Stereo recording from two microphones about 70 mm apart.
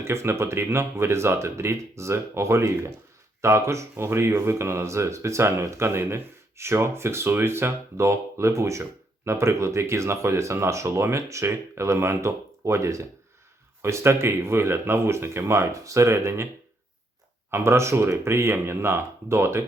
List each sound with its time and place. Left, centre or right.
0.0 s speech: right
17.5 s speech: right